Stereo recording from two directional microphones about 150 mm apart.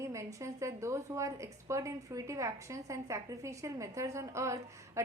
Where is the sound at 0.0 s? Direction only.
20° right (ahead or behind).